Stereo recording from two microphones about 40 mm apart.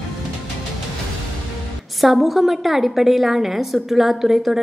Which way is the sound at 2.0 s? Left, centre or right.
Centre.